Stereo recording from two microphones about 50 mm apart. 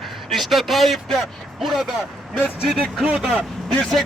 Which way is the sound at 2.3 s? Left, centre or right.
Centre.